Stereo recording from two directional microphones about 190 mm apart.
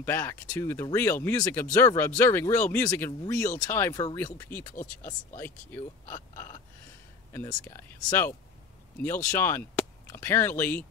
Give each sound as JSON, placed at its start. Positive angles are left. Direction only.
{"t": 0.0, "sound": "speech", "side_deg": 10}
{"t": 4.7, "sound": "speech", "side_deg": 45}
{"t": 5.4, "sound": "speech", "side_deg": 10}
{"t": 6.3, "sound": "gasp", "side_deg": 15}
{"t": 7.3, "sound": "speech", "side_deg": 15}